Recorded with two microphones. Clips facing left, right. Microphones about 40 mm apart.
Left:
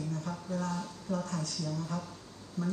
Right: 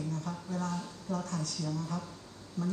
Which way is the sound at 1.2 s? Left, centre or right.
Left.